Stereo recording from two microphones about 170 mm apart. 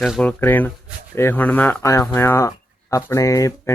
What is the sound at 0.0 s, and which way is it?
Speech, 5° left (ahead or behind).